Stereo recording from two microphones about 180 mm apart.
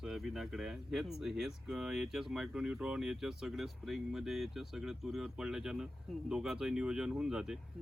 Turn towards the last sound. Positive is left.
turn(degrees=-5)  # may be behind; listen again after turning